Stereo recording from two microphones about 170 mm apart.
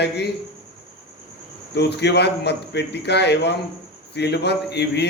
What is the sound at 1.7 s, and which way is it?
A man's voice, 80° left.